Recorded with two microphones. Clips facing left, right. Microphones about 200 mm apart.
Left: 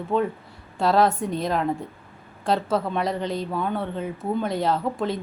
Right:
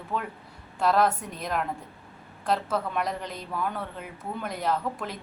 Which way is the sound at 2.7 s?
25° left (ahead or behind).